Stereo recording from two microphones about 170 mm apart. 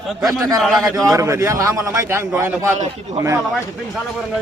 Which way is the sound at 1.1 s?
15° right (ahead or behind).